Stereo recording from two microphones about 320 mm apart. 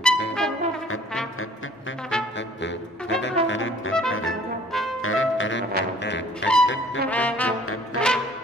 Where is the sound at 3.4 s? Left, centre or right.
Left.